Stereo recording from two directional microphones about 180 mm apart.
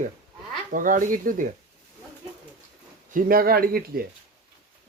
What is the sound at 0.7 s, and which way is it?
Speech, 50° right (ahead or behind).